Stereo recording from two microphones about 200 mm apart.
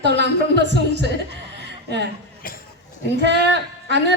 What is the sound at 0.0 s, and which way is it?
A man's voice, 60° right (ahead or behind).